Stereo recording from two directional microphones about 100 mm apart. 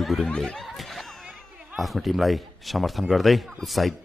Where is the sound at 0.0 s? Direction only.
Centre (ahead or behind).